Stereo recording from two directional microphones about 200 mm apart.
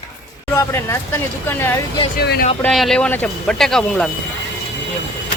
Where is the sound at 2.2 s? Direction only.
50° left (ahead or behind).